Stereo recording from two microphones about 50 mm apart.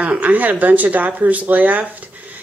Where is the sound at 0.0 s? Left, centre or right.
Right.